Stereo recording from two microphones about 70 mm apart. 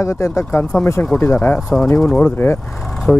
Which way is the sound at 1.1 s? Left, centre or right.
Left.